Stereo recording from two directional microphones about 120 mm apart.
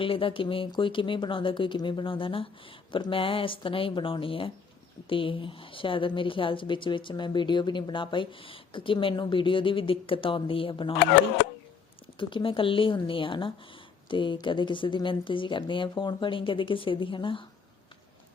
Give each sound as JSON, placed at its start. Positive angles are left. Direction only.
{"t": 0.0, "sound": "a woman's voice", "side_deg": 45}
{"t": 12.2, "sound": "a woman's voice", "side_deg": 45}